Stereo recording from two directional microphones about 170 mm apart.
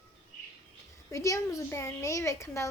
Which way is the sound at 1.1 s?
20° left (ahead or behind).